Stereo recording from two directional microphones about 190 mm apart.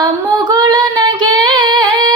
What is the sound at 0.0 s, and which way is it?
Female singing, 20° right (ahead or behind).